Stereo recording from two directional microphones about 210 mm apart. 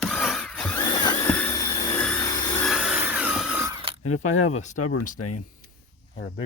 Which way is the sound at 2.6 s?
Centre (ahead or behind).